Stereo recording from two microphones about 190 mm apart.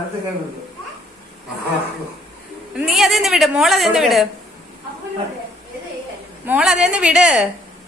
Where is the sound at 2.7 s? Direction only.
Centre (ahead or behind).